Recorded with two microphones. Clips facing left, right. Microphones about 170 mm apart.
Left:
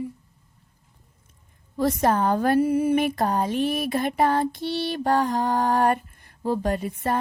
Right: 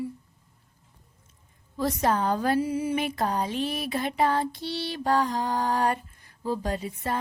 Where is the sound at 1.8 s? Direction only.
55° left (ahead or behind).